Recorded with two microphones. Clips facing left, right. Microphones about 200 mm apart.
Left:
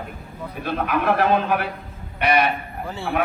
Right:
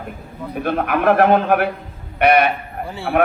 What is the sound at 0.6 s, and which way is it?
A man's voice, 55° right (ahead or behind).